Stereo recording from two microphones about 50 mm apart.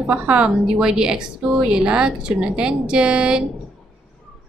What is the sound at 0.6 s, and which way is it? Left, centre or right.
Speech, centre.